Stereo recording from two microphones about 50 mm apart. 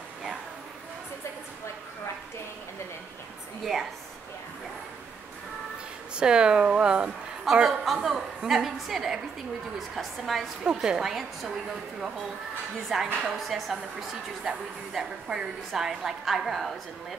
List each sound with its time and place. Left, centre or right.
6.1 s speech: centre
7.5 s chuckle: centre
7.8 s a woman's voice: centre
10.6 s a woman's voice: centre
12.9 s a woman's voice: centre